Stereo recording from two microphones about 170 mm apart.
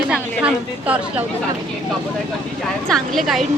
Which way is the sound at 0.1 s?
5° right (ahead or behind).